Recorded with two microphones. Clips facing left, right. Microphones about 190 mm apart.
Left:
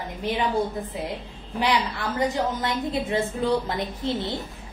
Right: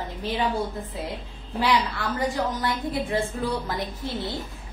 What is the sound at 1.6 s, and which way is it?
A woman's voice, 20° left (ahead or behind).